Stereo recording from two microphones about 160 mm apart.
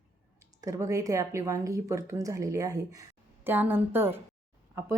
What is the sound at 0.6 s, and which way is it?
A woman's voice, 20° right (ahead or behind).